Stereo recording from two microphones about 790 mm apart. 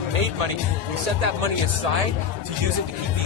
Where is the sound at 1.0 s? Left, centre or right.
Right.